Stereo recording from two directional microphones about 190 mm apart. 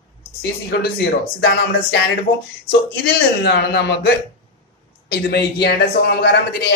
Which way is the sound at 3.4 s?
60° left (ahead or behind).